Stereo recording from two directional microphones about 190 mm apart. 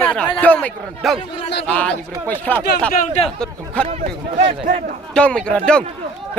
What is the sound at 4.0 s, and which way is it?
Speech, 35° right (ahead or behind).